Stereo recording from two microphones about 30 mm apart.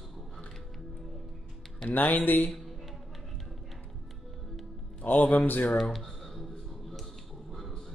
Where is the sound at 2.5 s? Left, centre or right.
Centre.